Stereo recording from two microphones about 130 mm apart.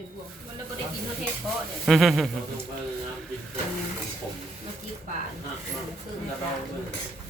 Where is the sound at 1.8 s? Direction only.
Centre (ahead or behind).